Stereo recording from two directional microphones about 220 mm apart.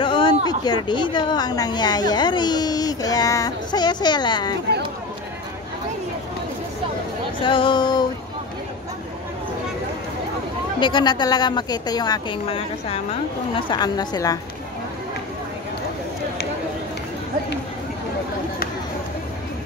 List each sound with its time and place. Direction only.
0.0 s a sound: 20° left (ahead or behind)
0.5 s speech: 20° left (ahead or behind)
7.4 s speech: 20° left (ahead or behind)
10.8 s a woman's voice: 20° left (ahead or behind)